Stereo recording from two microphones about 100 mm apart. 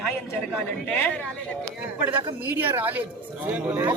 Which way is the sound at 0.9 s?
15° left (ahead or behind).